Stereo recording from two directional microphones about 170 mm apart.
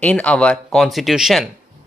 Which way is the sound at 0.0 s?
5° left (ahead or behind).